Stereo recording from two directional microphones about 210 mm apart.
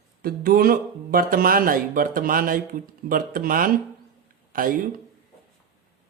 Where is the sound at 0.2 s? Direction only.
45° right (ahead or behind).